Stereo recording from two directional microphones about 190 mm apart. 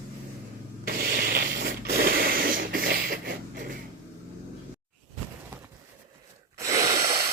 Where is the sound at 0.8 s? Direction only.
50° right (ahead or behind).